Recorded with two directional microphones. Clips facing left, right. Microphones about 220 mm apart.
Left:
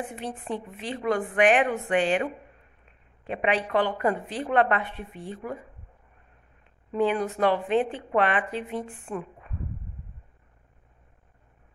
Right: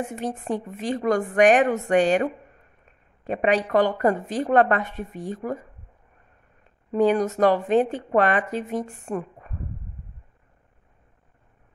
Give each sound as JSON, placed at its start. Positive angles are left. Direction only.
{"t": 0.0, "sound": "speech", "side_deg": -45}